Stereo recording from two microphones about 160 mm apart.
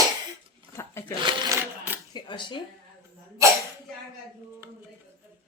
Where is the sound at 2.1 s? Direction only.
30° left (ahead or behind).